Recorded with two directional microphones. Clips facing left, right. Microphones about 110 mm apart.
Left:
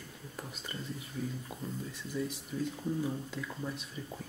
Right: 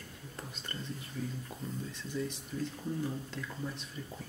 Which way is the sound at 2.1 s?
5° left (ahead or behind).